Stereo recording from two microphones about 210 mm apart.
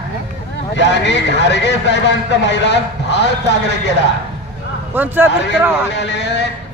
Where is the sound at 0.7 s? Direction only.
60° left (ahead or behind).